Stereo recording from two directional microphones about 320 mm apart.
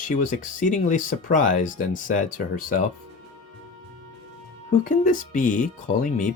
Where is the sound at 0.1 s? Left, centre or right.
Left.